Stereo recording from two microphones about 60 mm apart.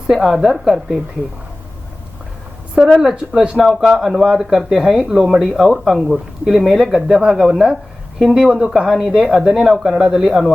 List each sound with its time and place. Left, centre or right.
0.1 s speech: centre
2.9 s speech: centre
8.4 s speech: centre
8.9 s speech: centre